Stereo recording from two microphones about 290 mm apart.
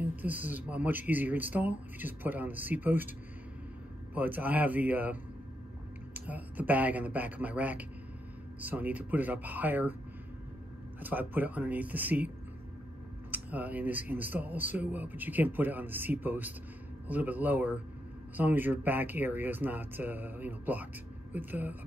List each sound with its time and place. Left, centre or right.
0.0 s speech: centre
4.1 s speech: centre
11.0 s speech: centre
13.3 s speech: centre